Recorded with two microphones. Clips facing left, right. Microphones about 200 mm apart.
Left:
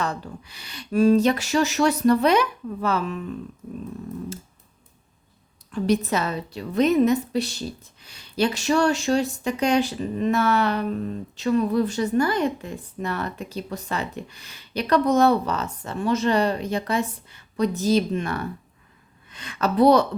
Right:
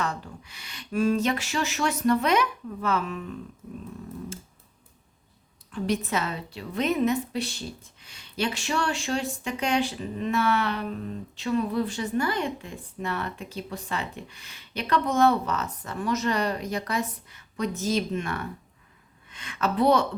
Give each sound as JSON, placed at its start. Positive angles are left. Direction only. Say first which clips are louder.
{"t": 0.0, "sound": "speech", "louder": "left 3 dB", "side_deg": 35}
{"t": 5.8, "sound": "a woman's voice", "louder": "left 5 dB", "side_deg": 40}